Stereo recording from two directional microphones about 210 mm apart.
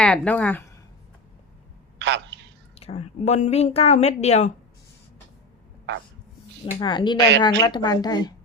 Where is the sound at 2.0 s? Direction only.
55° right (ahead or behind).